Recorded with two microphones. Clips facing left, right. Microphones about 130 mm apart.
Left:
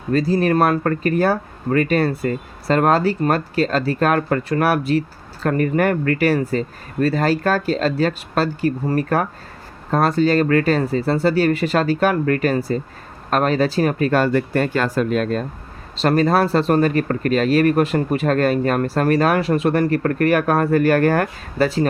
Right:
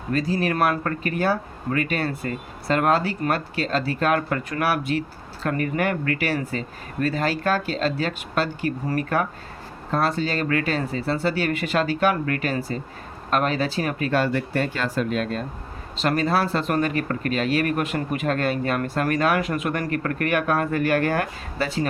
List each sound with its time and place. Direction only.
0.1 s speech: 35° left (ahead or behind)